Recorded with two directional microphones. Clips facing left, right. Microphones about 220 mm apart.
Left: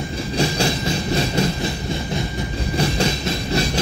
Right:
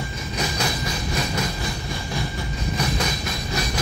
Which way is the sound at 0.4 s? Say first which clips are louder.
Left 6 dB; 30° left (ahead or behind).